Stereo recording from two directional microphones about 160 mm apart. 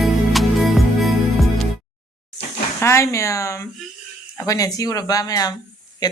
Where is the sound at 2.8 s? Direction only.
15° left (ahead or behind).